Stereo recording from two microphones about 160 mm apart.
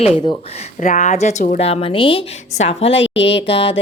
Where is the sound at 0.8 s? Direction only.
50° left (ahead or behind).